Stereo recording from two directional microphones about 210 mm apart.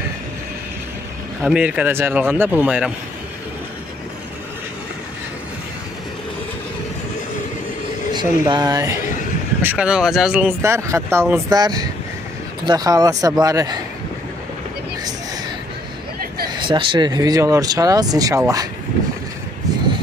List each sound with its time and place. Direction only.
1.4 s speech: 5° right (ahead or behind)
8.1 s speech: 20° right (ahead or behind)
9.6 s speech: 5° right (ahead or behind)
16.4 s speech: 20° right (ahead or behind)